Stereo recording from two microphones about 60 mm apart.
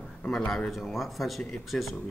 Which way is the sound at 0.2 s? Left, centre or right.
Left.